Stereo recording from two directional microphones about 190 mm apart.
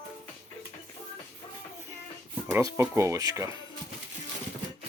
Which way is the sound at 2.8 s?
15° right (ahead or behind).